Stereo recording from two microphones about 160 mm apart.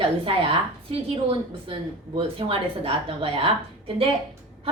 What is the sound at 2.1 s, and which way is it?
A woman's voice, 35° right (ahead or behind).